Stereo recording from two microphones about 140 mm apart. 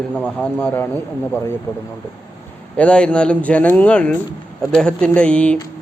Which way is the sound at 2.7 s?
10° left (ahead or behind).